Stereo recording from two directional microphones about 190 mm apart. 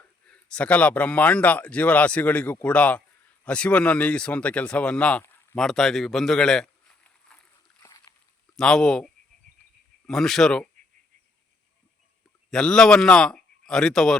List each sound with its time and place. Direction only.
0.3 s speech: 5° left (ahead or behind)
7.8 s a sound: 20° left (ahead or behind)
8.5 s speech: 5° left (ahead or behind)
12.5 s speech: 5° left (ahead or behind)